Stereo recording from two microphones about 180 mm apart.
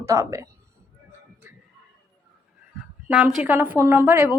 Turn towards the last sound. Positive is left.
turn(degrees=-10)  # may be behind; listen again after turning